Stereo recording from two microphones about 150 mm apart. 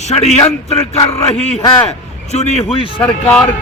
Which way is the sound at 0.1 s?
45° left (ahead or behind).